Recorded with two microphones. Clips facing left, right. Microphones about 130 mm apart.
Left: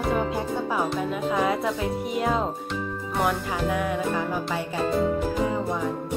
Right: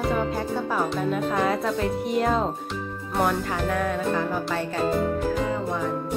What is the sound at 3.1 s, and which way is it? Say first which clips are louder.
Music: right 2 dB; centre (ahead or behind).